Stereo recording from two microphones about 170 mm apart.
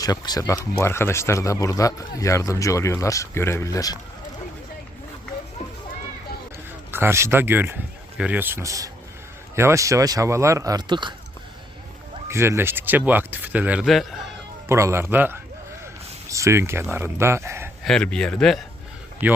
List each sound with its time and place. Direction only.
0.0 s speech: 25° left (ahead or behind)
6.9 s speech: 15° right (ahead or behind)
12.3 s speech: 15° right (ahead or behind); by 14.2 s centre (ahead or behind)
14.7 s speech: 15° right (ahead or behind)
17.8 s speech: 5° left (ahead or behind)
19.2 s speech: 10° right (ahead or behind)